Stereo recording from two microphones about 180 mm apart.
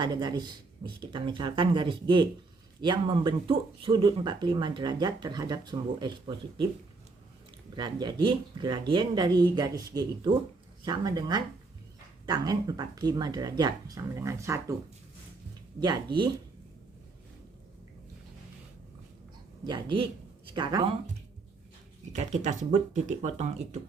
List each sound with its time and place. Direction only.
0.0 s speech: 25° right (ahead or behind)
7.8 s speech: 25° right (ahead or behind)
15.8 s speech: 25° right (ahead or behind)
19.6 s speech: 25° right (ahead or behind)
22.1 s speech: 40° right (ahead or behind)